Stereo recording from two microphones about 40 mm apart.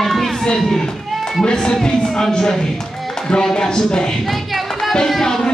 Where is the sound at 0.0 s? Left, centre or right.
Centre.